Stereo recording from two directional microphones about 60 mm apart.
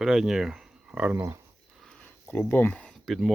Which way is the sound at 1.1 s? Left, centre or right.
Right.